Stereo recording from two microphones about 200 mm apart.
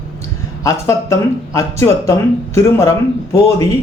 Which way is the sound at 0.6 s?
15° left (ahead or behind).